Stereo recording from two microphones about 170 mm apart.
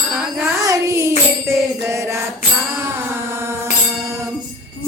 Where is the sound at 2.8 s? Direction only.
15° right (ahead or behind).